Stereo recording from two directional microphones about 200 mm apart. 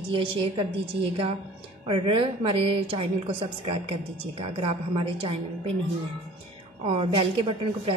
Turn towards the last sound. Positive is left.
turn(degrees=-25)  # may be behind; listen again after turning